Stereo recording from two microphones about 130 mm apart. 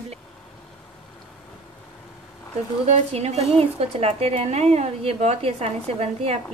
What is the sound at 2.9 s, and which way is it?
Speech, 55° right (ahead or behind).